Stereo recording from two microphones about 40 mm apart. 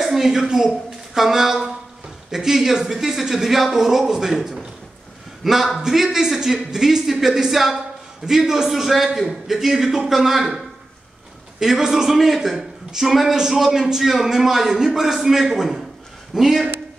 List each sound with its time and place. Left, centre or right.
0.0 s a woman's voice: centre
11.6 s a man's voice: centre